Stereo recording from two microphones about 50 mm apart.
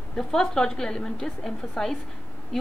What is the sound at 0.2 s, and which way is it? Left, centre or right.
A woman's voice, centre.